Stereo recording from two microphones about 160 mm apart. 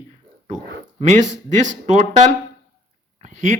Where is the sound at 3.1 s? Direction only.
50° right (ahead or behind).